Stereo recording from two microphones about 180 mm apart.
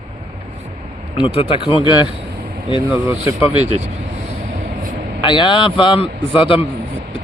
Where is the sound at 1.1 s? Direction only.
30° left (ahead or behind).